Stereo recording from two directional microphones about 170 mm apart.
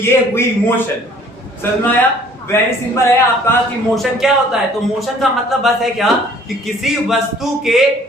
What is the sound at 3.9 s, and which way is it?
Speech, centre (ahead or behind).